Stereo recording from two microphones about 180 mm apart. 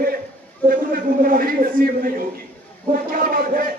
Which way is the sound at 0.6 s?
50° right (ahead or behind).